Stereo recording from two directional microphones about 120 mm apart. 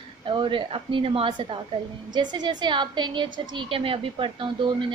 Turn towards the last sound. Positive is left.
turn(degrees=-45)  # may be behind; listen again after turning